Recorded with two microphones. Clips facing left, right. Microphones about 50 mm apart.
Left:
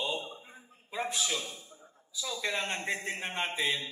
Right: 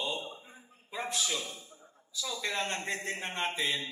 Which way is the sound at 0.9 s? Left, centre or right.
Left.